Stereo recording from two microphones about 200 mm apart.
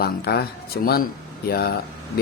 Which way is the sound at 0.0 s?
50° left (ahead or behind).